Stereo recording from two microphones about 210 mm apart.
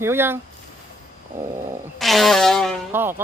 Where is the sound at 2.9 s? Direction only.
10° right (ahead or behind).